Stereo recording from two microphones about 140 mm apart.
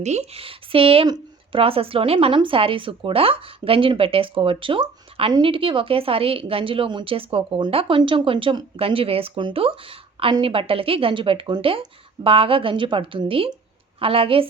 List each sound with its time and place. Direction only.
0.0 s speech: 55° right (ahead or behind)
1.0 s a sound: 30° right (ahead or behind)
1.6 s speech: 40° right (ahead or behind)